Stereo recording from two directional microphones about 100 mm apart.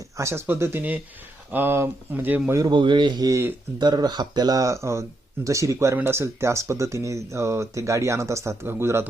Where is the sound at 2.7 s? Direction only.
50° right (ahead or behind).